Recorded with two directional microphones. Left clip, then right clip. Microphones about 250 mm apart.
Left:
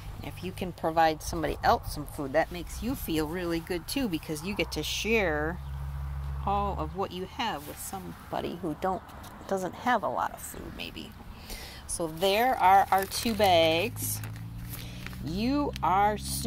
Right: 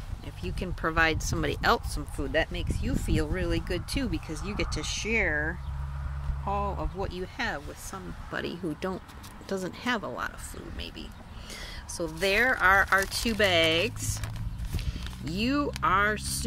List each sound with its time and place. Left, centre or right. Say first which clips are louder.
0.2 s speech: left 1 dB; centre
0.7 s speech: left 1 dB; centre
1.3 s speech: even; right
2.1 s speech: left 1 dB; centre
4.0 s speech: left 2 dB; centre
9.7 s speech: left 5 dB; right
11.9 s speech: even; centre
15.2 s speech: right 1 dB; centre